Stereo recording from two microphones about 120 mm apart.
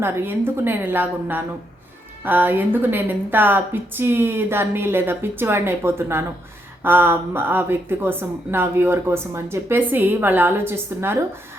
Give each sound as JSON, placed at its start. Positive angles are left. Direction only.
{"t": 0.0, "sound": "a woman's voice", "side_deg": -20}